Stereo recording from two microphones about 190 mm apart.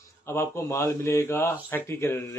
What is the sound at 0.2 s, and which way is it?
Speech, 15° left (ahead or behind).